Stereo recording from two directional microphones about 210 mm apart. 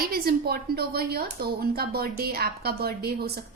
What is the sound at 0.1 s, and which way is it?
A woman's voice, 45° right (ahead or behind).